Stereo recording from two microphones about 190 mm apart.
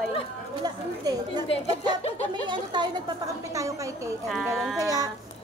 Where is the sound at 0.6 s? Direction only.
20° right (ahead or behind).